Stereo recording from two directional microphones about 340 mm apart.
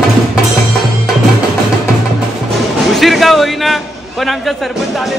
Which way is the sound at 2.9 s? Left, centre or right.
Centre.